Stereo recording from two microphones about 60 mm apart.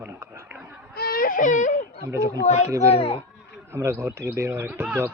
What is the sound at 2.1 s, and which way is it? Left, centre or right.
Speech, right.